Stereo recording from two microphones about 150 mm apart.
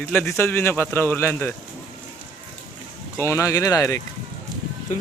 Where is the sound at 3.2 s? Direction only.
20° left (ahead or behind).